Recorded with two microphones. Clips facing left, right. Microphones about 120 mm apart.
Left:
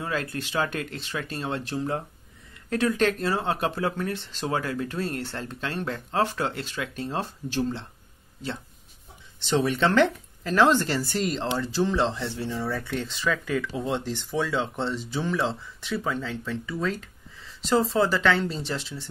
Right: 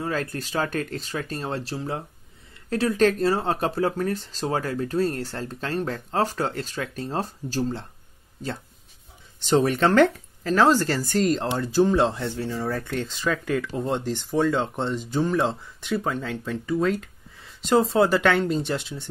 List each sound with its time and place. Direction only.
0.0 s speech: 40° right (ahead or behind)
9.4 s speech: 45° right (ahead or behind)